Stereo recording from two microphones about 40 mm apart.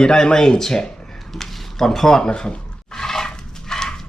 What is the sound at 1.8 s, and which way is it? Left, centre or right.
Speech, centre.